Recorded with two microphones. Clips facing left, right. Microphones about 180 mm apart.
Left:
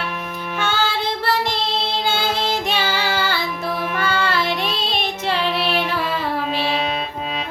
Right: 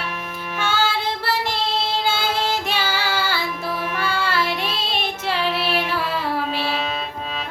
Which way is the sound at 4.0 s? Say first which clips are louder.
Left 2 dB; 5° right (ahead or behind).